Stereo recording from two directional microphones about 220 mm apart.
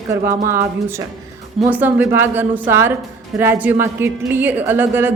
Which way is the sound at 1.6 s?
5° right (ahead or behind).